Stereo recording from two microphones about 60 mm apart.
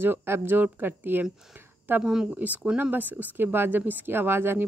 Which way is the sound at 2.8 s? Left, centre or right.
Right.